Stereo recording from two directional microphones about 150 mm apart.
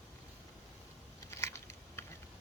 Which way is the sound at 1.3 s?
15° left (ahead or behind).